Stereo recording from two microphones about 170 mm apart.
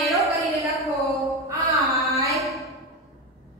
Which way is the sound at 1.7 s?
20° right (ahead or behind).